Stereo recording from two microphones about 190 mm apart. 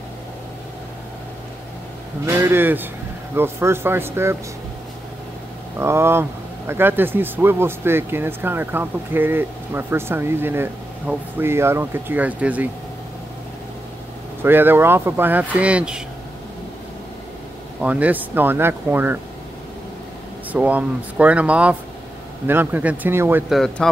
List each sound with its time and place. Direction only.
2.2 s speech: 10° right (ahead or behind)
5.8 s speech: 15° right (ahead or behind)
14.4 s speech: 10° right (ahead or behind)
17.8 s speech: 10° right (ahead or behind)
20.5 s speech: 5° right (ahead or behind)
23.5 s speech: centre (ahead or behind)